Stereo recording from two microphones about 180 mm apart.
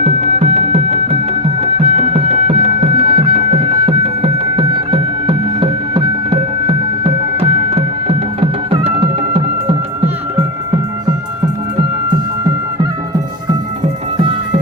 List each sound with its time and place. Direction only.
0.0 s music: 35° right (ahead or behind)